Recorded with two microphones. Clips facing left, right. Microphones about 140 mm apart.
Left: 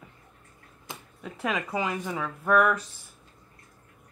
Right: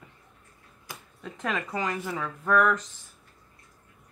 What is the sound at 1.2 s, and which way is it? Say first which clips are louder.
Speech: left 1 dB; 10° left (ahead or behind).